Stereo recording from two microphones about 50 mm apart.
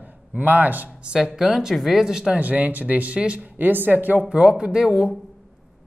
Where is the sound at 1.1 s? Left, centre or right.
Centre.